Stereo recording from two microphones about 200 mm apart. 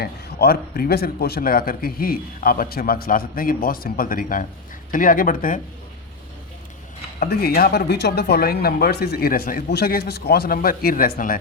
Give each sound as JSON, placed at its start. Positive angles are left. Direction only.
{"t": 0.0, "sound": "speech", "side_deg": 50}
{"t": 7.2, "sound": "speech", "side_deg": 50}